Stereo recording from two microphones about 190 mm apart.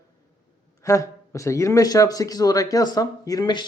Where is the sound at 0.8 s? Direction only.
15° left (ahead or behind).